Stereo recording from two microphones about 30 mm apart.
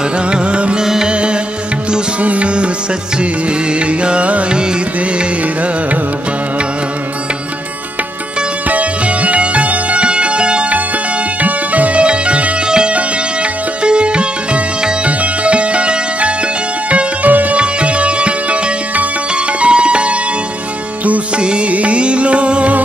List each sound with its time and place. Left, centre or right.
0.3 s music: right
0.7 s music: centre
1.0 s music: right
3.8 s music: right
8.6 s music: right
10.0 s music: right
11.4 s music: right
12.0 s music: right
12.6 s music: right
16.9 s music: right
17.6 s music: right
19.6 s music: right
21.4 s music: right
21.6 s music: right